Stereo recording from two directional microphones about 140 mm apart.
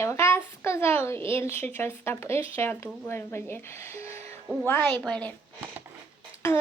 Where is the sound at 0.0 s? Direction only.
20° left (ahead or behind).